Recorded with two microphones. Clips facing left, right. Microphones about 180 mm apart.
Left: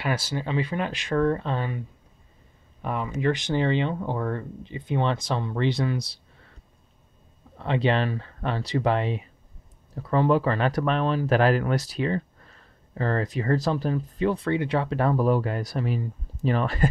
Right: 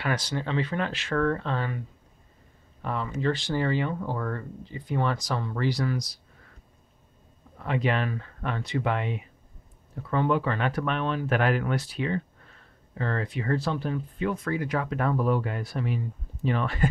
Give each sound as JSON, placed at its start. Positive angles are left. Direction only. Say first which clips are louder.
{"t": 0.0, "sound": "speech", "louder": "left 1 dB", "side_deg": 10}
{"t": 7.5, "sound": "speech", "louder": "left 3 dB", "side_deg": 30}